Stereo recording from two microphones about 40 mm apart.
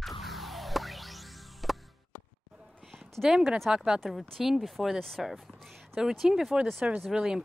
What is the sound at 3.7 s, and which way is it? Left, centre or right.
Speech, centre.